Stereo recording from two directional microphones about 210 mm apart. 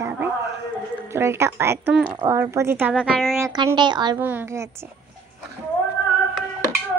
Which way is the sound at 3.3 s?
15° right (ahead or behind).